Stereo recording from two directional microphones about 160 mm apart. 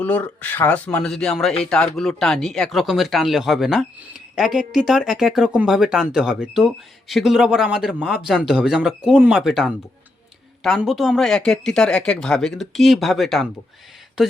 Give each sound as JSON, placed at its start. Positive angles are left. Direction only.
{"t": 0.0, "sound": "speech", "side_deg": 10}